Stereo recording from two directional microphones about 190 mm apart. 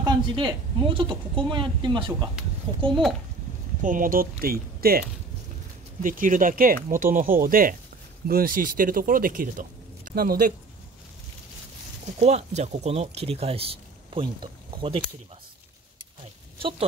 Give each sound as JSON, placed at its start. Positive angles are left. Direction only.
{"t": 0.0, "sound": "a woman's voice", "side_deg": -25}
{"t": 2.9, "sound": "a child's voice", "side_deg": 0}
{"t": 3.8, "sound": "speech", "side_deg": -45}
{"t": 6.0, "sound": "speech", "side_deg": -45}
{"t": 12.2, "sound": "speech", "side_deg": -35}